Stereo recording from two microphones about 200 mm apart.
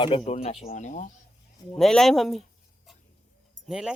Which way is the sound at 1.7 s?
5° left (ahead or behind).